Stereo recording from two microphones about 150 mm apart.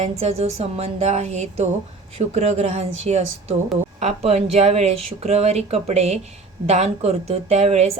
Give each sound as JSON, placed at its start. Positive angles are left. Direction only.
{"t": 0.0, "sound": "speech", "side_deg": -45}